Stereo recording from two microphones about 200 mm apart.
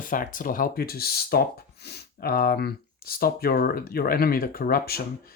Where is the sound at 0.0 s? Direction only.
40° left (ahead or behind).